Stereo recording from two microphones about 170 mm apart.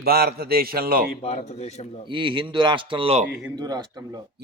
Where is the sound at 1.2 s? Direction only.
40° left (ahead or behind).